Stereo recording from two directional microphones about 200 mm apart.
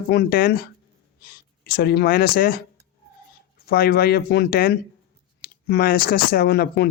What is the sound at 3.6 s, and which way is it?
Speech, 50° left (ahead or behind).